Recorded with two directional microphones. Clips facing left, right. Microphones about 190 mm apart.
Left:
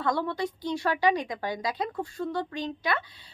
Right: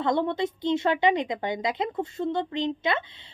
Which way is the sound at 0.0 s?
20° right (ahead or behind).